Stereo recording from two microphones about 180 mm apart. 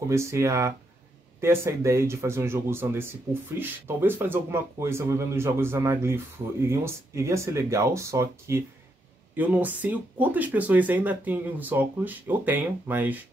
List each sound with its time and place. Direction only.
0.1 s speech: 15° right (ahead or behind)